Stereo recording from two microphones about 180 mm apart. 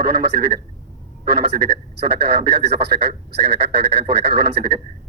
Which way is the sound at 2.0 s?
65° right (ahead or behind).